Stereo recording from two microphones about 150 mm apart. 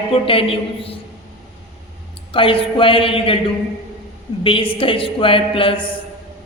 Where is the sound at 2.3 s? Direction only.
35° left (ahead or behind).